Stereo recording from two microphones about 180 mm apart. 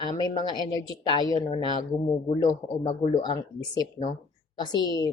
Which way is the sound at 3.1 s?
25° left (ahead or behind).